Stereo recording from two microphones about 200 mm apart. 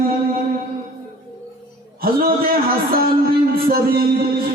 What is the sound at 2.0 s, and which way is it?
A man's voice, 50° right (ahead or behind).